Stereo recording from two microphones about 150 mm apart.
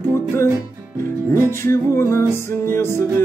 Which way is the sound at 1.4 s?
15° left (ahead or behind).